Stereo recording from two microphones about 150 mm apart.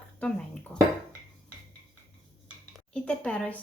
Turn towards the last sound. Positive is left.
turn(degrees=5)  # may be behind; listen again after turning